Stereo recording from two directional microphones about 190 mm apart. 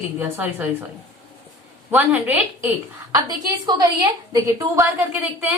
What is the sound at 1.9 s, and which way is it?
A woman's voice, 10° right (ahead or behind).